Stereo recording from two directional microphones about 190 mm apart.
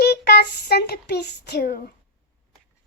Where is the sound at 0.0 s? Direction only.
60° left (ahead or behind).